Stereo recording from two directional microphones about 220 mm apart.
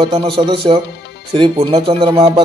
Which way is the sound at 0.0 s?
25° right (ahead or behind).